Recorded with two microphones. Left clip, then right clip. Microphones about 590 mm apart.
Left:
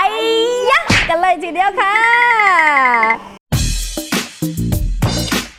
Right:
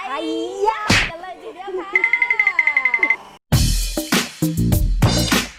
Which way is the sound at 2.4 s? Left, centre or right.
Left.